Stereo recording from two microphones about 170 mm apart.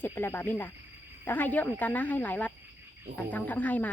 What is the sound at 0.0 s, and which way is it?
Speech, 15° left (ahead or behind).